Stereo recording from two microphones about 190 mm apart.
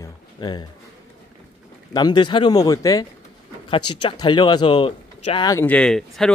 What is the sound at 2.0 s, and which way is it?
Speech, 20° left (ahead or behind).